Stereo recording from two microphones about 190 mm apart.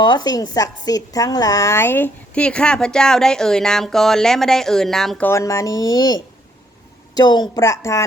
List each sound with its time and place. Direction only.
0.0 s a woman's voice: 20° left (ahead or behind)